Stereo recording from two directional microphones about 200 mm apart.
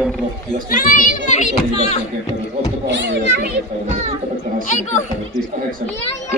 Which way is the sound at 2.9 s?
60° right (ahead or behind).